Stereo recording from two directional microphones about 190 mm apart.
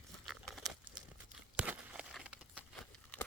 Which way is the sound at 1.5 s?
5° right (ahead or behind).